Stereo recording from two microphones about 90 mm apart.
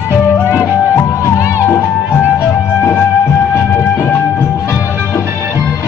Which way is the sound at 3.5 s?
25° left (ahead or behind).